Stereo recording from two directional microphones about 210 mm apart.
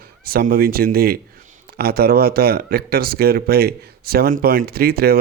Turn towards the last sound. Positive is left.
turn(degrees=-45)  # may be behind; listen again after turning